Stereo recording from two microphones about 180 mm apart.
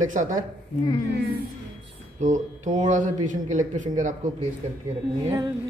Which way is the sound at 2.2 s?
40° right (ahead or behind).